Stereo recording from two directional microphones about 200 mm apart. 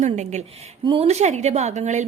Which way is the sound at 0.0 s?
35° right (ahead or behind).